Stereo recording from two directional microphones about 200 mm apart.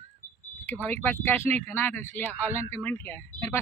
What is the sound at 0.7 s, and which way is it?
Speech, 10° left (ahead or behind).